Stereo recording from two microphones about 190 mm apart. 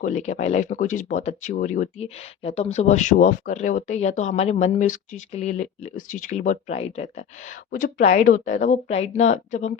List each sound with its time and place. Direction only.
0.0 s speech: 40° left (ahead or behind)